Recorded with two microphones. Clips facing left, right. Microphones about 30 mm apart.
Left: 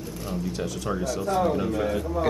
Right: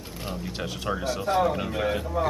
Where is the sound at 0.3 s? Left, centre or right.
Right.